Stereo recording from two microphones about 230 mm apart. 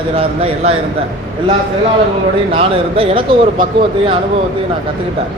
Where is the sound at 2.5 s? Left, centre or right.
Right.